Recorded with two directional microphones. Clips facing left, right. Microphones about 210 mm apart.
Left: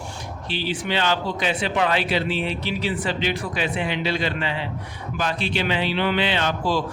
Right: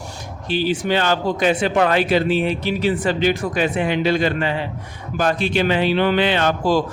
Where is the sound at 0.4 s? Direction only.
45° right (ahead or behind).